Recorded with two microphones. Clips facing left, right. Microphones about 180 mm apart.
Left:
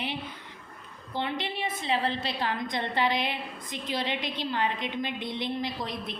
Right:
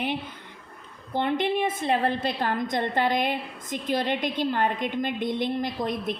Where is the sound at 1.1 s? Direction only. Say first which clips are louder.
Right 7 dB; 50° right (ahead or behind).